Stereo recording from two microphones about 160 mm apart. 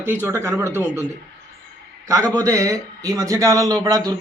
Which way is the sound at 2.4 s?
20° right (ahead or behind).